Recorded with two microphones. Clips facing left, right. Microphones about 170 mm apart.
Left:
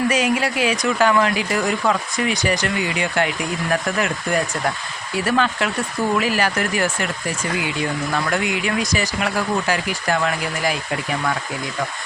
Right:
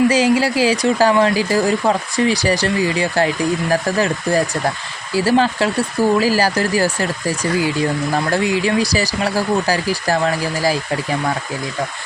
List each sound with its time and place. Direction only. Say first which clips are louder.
0.1 s speech: right 5 dB; 30° right (ahead or behind)